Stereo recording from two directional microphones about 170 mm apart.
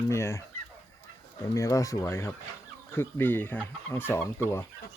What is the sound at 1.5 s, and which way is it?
Speech, 20° left (ahead or behind).